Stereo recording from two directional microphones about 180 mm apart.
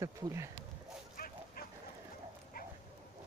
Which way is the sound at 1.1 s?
55° left (ahead or behind).